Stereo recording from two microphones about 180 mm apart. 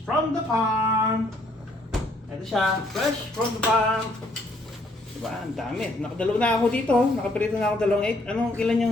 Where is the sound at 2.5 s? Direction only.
Centre (ahead or behind).